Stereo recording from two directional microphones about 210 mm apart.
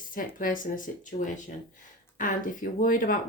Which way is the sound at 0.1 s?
40° left (ahead or behind).